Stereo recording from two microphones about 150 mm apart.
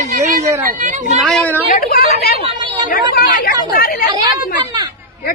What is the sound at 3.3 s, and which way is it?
Speech, 85° left.